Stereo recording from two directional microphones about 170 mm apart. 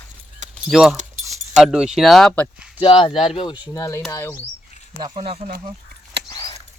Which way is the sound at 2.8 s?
30° left (ahead or behind).